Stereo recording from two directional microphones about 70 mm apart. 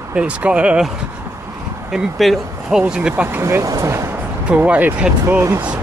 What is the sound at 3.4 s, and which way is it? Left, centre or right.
Speech, right.